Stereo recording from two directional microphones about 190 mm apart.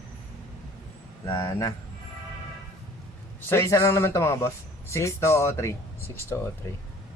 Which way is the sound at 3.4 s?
15° left (ahead or behind).